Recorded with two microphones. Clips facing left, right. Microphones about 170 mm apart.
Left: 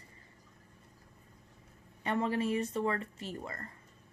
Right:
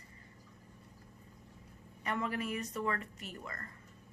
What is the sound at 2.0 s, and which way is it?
A woman's voice, 30° left (ahead or behind).